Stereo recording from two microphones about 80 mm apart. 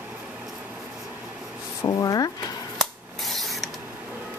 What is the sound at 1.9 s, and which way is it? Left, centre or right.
Drawer open or close, left.